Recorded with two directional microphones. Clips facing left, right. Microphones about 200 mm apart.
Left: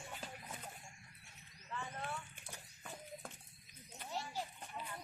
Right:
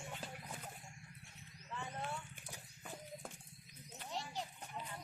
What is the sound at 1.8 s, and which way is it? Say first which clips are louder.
Horse: right 2 dB; 15° right (ahead or behind).